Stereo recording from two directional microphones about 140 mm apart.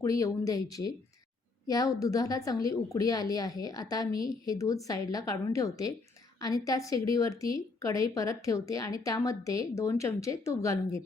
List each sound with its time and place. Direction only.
0.0 s a woman's voice: 20° left (ahead or behind)